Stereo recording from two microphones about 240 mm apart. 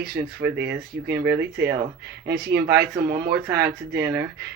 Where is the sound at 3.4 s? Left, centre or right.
Centre.